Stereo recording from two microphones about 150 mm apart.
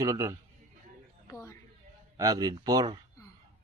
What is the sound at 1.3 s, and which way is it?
Speech, 20° left (ahead or behind).